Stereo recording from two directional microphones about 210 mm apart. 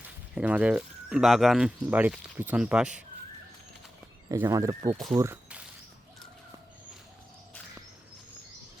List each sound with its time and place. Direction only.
0.3 s speech: 5° right (ahead or behind)
4.3 s speech: 15° right (ahead or behind)